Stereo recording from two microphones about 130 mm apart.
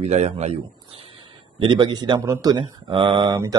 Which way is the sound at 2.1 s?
20° right (ahead or behind).